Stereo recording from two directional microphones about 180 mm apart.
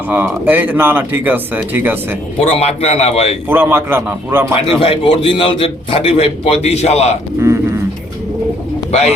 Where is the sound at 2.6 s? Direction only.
35° left (ahead or behind).